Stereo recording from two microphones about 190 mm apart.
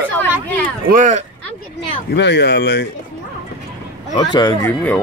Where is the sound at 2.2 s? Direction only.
65° left (ahead or behind).